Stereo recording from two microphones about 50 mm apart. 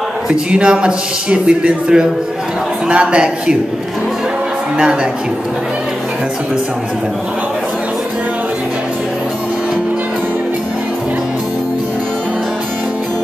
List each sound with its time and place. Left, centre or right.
0.3 s a man's voice: right